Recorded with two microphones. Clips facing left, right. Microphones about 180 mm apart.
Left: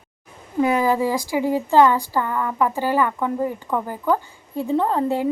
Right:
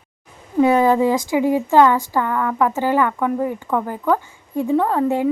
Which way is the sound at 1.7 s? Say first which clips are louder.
Right 1 dB; 15° left (ahead or behind).